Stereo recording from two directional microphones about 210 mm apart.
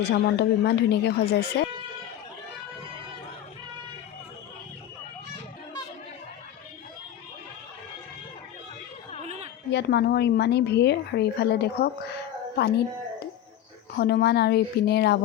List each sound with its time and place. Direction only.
0.0 s speech: 55° left (ahead or behind)
9.2 s a sound: 30° right (ahead or behind)
9.6 s speech: 55° left (ahead or behind)